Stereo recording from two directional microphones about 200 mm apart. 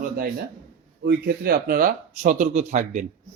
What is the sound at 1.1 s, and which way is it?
A man's voice, 50° right (ahead or behind).